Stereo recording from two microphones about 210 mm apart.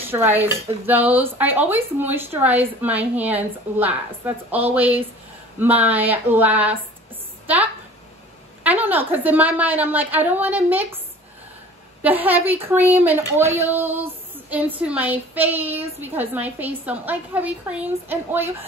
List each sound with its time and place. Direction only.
0.1 s a woman's voice: 10° right (ahead or behind)
12.0 s a woman's voice: 10° right (ahead or behind)